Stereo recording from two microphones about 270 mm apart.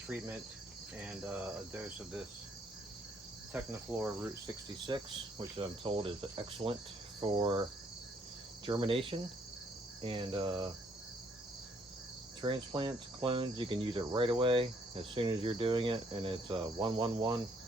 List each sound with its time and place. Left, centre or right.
1.0 s cricket: centre
3.5 s cricket: centre
5.5 s speech: centre
7.2 s cricket: centre
8.6 s speech: centre
12.4 s speech: centre